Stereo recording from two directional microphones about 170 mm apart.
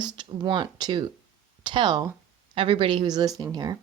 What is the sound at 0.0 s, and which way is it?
A woman's voice, 25° right (ahead or behind).